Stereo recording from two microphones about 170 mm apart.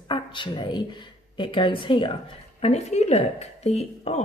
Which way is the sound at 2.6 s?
40° left (ahead or behind).